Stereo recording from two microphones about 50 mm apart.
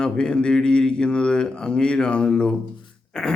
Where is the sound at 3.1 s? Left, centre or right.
Centre.